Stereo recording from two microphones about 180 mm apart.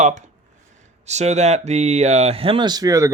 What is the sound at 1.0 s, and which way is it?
Speech, 40° right (ahead or behind).